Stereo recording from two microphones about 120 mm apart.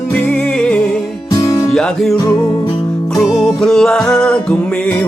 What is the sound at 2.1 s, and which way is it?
Music, 30° left (ahead or behind).